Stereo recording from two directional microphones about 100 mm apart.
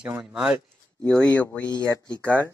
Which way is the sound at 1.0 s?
15° left (ahead or behind).